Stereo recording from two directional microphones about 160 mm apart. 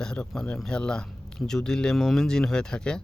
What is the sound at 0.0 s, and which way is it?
Speech, 5° left (ahead or behind).